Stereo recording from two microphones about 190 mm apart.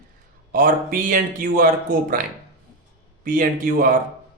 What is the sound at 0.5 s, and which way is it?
Speech, 45° right (ahead or behind).